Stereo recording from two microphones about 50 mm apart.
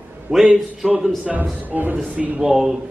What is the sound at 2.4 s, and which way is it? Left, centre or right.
Speech, centre.